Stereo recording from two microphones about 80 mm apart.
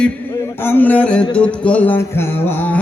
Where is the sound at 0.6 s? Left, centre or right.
Left.